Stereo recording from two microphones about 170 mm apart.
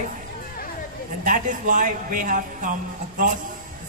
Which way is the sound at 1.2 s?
50° right (ahead or behind).